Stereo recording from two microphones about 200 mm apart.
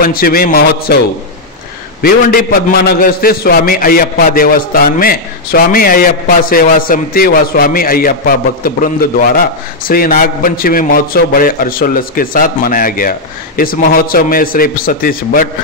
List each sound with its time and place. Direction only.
0.0 s a man's voice: 45° left (ahead or behind)
2.0 s a man's voice: 50° left (ahead or behind)